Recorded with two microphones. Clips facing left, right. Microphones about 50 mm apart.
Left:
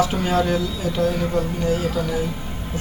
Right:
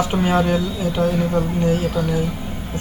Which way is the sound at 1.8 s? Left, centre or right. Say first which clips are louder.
Right 2 dB; centre.